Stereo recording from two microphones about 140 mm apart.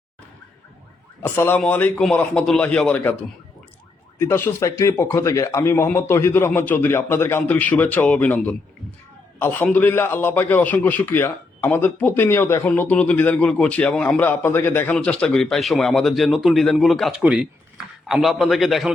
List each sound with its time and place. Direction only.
1.2 s a man's voice: 15° left (ahead or behind)
4.2 s a man's voice: 20° left (ahead or behind); by 18.9 s centre (ahead or behind)